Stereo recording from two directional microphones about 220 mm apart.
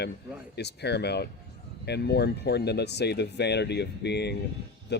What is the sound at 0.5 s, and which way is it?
Speech, 50° left (ahead or behind).